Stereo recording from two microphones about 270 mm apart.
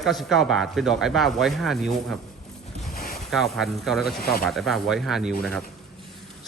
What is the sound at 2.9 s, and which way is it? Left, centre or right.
Boat, left.